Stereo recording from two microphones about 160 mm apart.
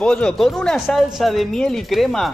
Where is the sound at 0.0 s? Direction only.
5° left (ahead or behind).